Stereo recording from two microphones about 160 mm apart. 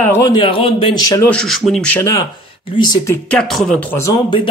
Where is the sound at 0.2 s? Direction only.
30° left (ahead or behind).